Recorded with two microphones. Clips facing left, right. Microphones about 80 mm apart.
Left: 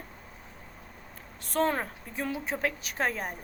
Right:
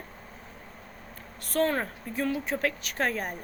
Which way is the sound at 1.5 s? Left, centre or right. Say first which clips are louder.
Right 1 dB; centre.